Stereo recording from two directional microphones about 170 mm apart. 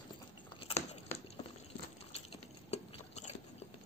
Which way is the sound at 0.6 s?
35° left (ahead or behind).